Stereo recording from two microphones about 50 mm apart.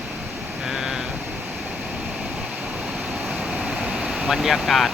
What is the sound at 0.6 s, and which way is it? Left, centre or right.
Speech, centre.